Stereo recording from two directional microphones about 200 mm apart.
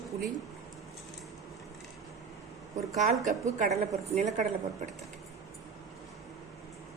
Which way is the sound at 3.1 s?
40° right (ahead or behind).